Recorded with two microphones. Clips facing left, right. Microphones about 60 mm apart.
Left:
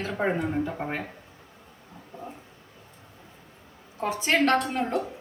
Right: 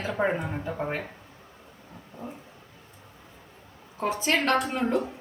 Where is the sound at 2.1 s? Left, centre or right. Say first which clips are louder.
Even; left.